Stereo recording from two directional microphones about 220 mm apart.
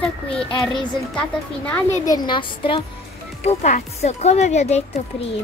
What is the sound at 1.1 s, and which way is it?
A woman's voice, 5° left (ahead or behind).